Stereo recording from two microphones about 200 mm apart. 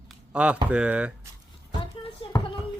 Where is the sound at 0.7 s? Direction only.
5° right (ahead or behind).